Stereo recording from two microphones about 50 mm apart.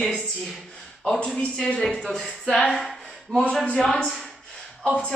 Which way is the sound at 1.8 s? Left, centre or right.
Centre.